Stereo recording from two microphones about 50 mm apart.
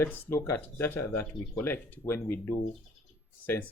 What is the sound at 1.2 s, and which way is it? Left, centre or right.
Speech, left.